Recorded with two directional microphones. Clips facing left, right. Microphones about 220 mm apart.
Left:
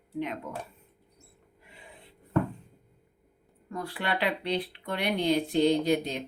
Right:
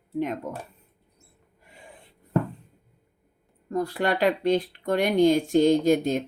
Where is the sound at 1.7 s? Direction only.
45° right (ahead or behind).